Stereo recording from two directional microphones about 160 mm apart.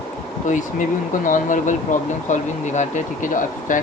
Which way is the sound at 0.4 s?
55° left (ahead or behind).